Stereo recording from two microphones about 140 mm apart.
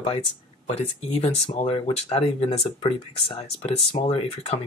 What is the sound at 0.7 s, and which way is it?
Speech, 50° left (ahead or behind).